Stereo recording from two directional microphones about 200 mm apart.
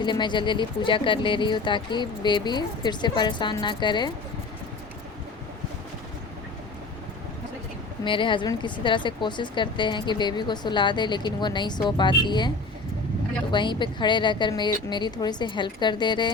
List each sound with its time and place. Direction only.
0.0 s a woman's voice: 20° left (ahead or behind)
8.0 s a woman's voice: 25° left (ahead or behind)
13.5 s a woman's voice: 25° left (ahead or behind)